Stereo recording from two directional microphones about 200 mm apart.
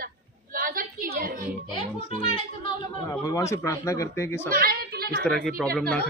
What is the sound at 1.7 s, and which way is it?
A child's voice, 25° left (ahead or behind).